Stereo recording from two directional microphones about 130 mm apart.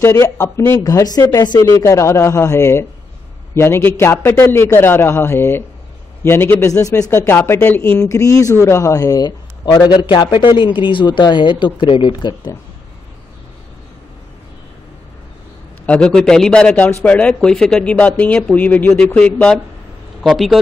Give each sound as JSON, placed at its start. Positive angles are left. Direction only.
{"t": 0.0, "sound": "a man's voice", "side_deg": 25}
{"t": 15.8, "sound": "speech", "side_deg": 10}